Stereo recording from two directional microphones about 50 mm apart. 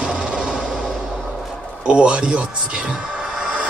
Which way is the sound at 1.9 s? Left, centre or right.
Right.